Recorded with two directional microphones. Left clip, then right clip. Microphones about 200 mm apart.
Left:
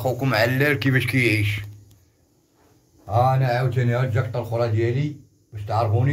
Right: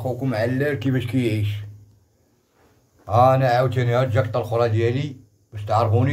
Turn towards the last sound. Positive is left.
turn(degrees=-35)  # may be behind; listen again after turning